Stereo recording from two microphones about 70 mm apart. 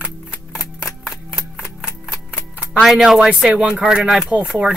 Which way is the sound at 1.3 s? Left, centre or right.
Centre.